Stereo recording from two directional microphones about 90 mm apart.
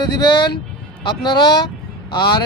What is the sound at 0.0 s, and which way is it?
Speech, 55° left (ahead or behind).